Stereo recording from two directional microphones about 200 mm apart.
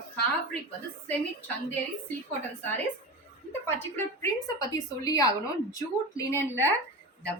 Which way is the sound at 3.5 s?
10° left (ahead or behind).